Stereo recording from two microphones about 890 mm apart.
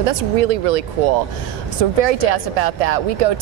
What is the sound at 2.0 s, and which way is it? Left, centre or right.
Speech, right.